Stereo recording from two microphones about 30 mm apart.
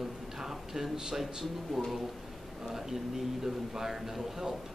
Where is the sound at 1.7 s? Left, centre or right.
Centre.